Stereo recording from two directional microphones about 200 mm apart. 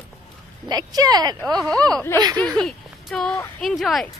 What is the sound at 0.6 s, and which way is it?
Speech, 20° right (ahead or behind).